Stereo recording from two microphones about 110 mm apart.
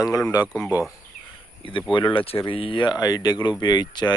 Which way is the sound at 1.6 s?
50° left (ahead or behind).